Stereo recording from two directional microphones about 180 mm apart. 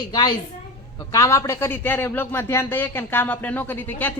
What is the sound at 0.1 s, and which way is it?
A woman's voice, 20° left (ahead or behind).